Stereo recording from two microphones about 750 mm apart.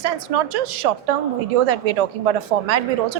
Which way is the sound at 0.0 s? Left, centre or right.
Right.